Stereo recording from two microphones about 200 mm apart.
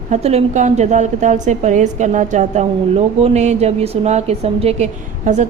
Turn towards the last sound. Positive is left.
turn(degrees=-35)  # may be behind; listen again after turning